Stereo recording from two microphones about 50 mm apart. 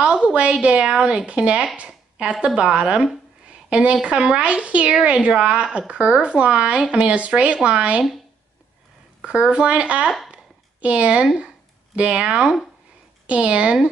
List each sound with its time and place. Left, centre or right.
0.0 s speech: right
9.2 s speech: right
10.3 s a sound: right
12.2 s speech: centre
13.3 s speech: right